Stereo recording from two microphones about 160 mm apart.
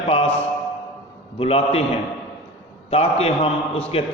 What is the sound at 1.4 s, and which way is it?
Mantra, 40° left (ahead or behind).